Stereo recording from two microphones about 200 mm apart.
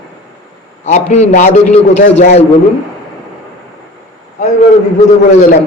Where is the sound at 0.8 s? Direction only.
35° left (ahead or behind).